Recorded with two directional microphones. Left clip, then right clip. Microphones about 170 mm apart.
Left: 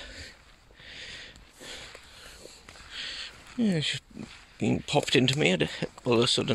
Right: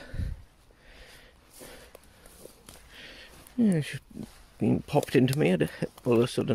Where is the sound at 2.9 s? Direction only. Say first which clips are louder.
Left 11 dB; 30° right (ahead or behind).